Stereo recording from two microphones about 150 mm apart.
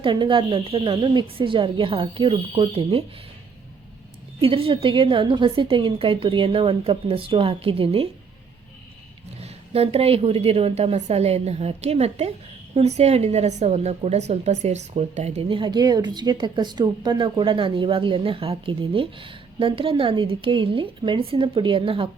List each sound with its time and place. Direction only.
0.0 s a woman's voice: 30° right (ahead or behind)
4.4 s a woman's voice: 40° right (ahead or behind)
9.4 s a woman's voice: 40° right (ahead or behind)